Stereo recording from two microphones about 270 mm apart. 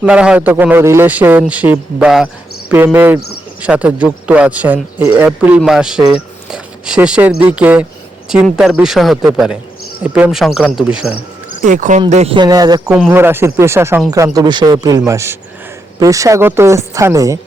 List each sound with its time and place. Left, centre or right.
0.0 s a man's voice: centre
11.6 s a man's voice: right; by 17.4 s centre